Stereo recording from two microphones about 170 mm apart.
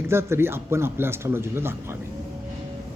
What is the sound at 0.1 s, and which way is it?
Speech, 15° right (ahead or behind).